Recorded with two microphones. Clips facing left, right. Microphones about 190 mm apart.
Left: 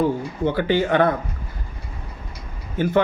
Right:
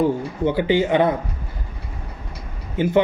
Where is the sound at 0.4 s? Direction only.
15° right (ahead or behind).